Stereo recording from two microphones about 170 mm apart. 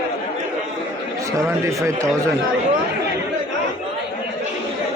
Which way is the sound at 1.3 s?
20° right (ahead or behind).